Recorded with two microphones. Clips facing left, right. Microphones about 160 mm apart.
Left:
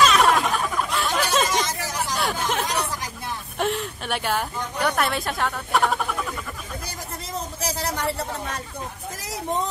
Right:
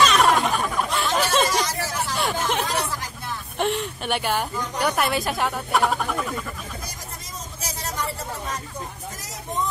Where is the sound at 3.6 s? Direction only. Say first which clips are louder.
Right 1 dB; centre (ahead or behind).